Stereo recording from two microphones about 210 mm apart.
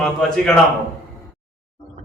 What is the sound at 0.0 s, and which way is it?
Speech, 5° left (ahead or behind).